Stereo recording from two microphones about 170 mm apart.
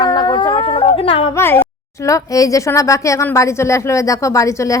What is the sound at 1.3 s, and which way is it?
A woman's voice, 15° left (ahead or behind).